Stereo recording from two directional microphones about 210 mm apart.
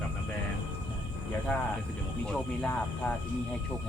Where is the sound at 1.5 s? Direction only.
5° left (ahead or behind).